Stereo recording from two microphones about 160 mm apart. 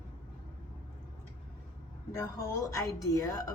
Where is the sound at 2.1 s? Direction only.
20° left (ahead or behind).